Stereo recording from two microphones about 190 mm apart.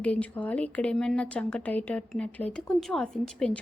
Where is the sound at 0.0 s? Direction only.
10° left (ahead or behind).